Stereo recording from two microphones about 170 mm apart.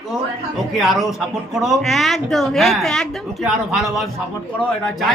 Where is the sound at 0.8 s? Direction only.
Centre (ahead or behind).